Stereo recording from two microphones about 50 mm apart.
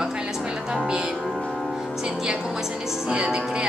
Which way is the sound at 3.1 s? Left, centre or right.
Centre.